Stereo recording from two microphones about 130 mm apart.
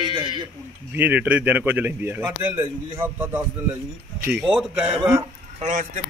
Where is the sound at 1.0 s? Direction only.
15° right (ahead or behind).